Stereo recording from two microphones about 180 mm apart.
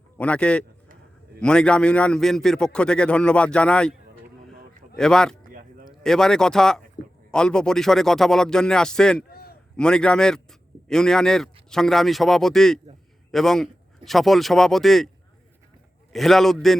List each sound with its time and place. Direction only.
0.2 s a man's voice: 5° left (ahead or behind)
4.9 s a man's voice: 5° left (ahead or behind)
9.3 s a sound: 60° left (ahead or behind)
9.7 s a man's voice: 5° left (ahead or behind)
16.1 s a man's voice: centre (ahead or behind)